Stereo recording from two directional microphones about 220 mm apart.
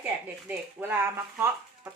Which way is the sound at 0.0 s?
10° right (ahead or behind).